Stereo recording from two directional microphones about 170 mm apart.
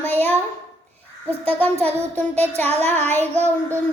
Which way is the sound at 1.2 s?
10° left (ahead or behind).